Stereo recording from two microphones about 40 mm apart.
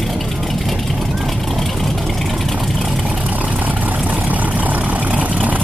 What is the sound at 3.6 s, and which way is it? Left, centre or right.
Vehicle, right.